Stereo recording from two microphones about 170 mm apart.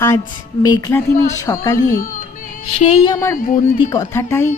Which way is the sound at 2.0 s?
50° left (ahead or behind).